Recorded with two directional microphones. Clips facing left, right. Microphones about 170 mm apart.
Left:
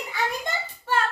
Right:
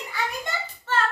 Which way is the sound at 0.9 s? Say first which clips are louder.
Left 1 dB; 10° left (ahead or behind).